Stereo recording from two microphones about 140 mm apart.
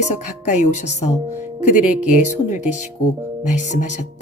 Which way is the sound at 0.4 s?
55° left (ahead or behind).